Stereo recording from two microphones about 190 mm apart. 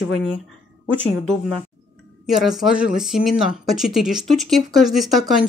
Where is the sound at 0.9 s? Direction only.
5° left (ahead or behind).